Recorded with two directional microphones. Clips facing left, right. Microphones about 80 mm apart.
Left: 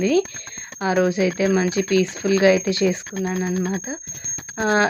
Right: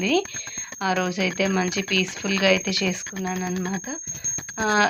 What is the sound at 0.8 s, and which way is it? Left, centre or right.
Speech, left.